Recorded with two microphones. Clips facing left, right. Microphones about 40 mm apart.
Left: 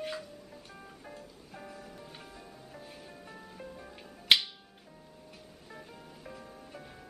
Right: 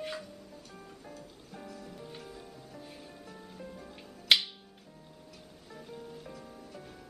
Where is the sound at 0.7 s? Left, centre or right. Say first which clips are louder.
Even; left.